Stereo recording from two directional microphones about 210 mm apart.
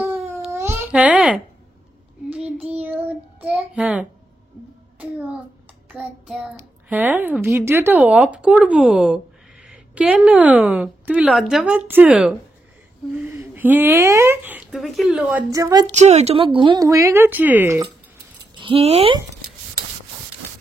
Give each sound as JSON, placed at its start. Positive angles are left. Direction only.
{"t": 0.0, "sound": "babbling", "side_deg": -10}
{"t": 2.4, "sound": "child singing", "side_deg": -5}
{"t": 5.9, "sound": "a child's voice", "side_deg": -5}
{"t": 15.5, "sound": "speech", "side_deg": -15}
{"t": 15.9, "sound": "speech", "side_deg": -35}
{"t": 18.5, "sound": "speech", "side_deg": -25}